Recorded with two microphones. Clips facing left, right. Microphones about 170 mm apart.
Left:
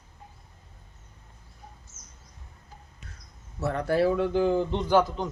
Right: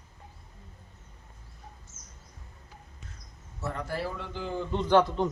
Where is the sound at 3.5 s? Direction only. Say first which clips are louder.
Left 9 dB; 65° left (ahead or behind).